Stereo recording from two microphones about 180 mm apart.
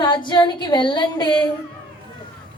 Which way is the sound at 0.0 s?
25° left (ahead or behind).